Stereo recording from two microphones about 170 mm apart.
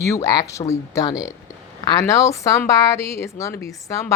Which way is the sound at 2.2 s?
20° left (ahead or behind).